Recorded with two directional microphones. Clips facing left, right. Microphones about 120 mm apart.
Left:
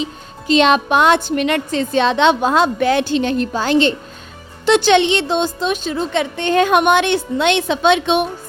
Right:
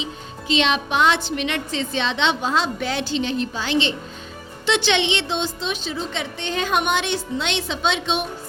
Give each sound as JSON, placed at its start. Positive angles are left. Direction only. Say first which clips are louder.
{"t": 0.0, "sound": "a woman's voice", "louder": "left 6 dB", "side_deg": 45}